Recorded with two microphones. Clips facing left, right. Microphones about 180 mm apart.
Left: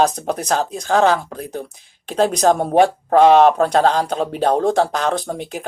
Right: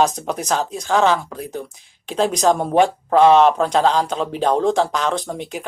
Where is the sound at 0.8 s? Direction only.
50° left (ahead or behind).